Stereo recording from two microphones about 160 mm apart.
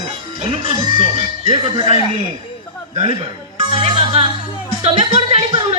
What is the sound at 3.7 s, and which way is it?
Music, 35° right (ahead or behind).